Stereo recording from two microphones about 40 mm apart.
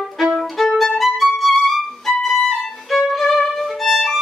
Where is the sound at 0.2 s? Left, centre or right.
Centre.